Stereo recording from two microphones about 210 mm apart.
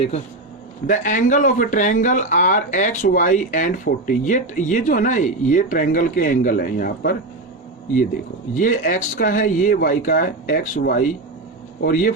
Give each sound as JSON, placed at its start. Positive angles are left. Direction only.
{"t": 0.9, "sound": "speech", "side_deg": 35}
{"t": 8.5, "sound": "speech", "side_deg": 40}